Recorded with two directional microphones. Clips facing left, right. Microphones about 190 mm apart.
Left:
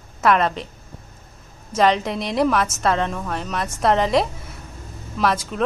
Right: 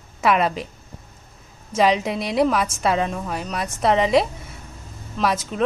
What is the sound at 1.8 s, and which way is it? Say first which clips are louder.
A woman's voice: even; 5° right (ahead or behind).